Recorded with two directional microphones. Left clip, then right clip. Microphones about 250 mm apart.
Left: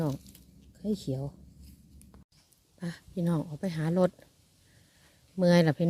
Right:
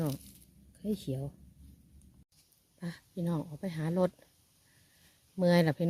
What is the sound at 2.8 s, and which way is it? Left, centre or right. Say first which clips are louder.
Speech: left 4 dB; centre.